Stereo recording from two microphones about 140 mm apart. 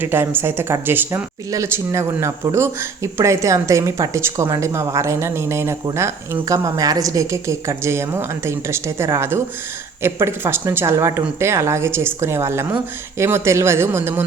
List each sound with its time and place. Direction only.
0.0 s speech: 15° right (ahead or behind)